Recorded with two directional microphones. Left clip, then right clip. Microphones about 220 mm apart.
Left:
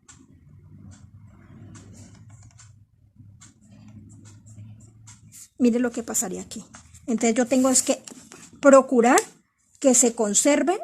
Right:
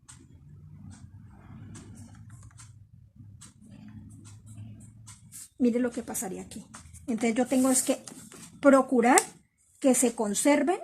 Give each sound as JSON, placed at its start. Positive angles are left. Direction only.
{"t": 5.6, "sound": "speech", "side_deg": 40}